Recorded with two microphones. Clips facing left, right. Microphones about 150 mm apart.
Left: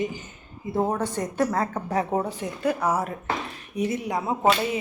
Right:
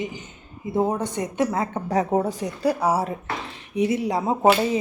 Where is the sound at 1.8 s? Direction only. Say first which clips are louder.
Right 3 dB; 40° right (ahead or behind).